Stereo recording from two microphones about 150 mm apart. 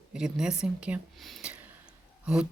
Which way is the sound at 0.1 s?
5° right (ahead or behind).